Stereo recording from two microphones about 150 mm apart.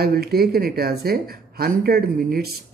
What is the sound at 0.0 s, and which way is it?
Speech, 90° right.